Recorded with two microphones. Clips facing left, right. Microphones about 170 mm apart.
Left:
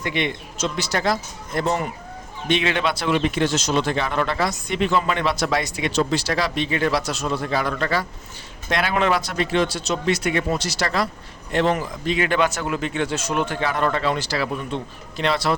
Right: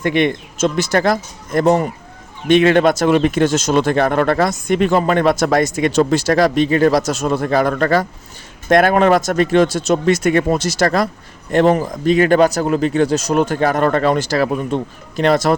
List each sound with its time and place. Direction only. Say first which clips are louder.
0.0 s speech: right 9 dB; 50° right (ahead or behind)